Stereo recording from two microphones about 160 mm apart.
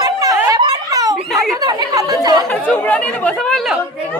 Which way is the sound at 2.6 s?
10° left (ahead or behind).